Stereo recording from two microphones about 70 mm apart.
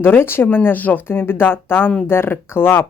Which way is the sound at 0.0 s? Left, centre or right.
Left.